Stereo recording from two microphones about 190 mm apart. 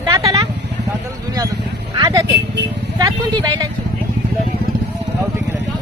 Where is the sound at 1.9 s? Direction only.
20° right (ahead or behind).